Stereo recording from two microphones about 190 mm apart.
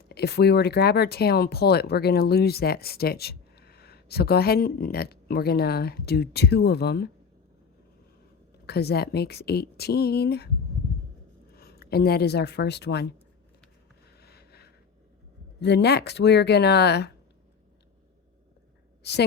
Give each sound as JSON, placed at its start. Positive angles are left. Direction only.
{"t": 0.1, "sound": "speech", "side_deg": 60}
{"t": 8.6, "sound": "speech", "side_deg": 55}
{"t": 11.5, "sound": "speech", "side_deg": 55}
{"t": 14.2, "sound": "a sound", "side_deg": 55}
{"t": 15.6, "sound": "speech", "side_deg": 60}
{"t": 19.0, "sound": "a woman's voice", "side_deg": 60}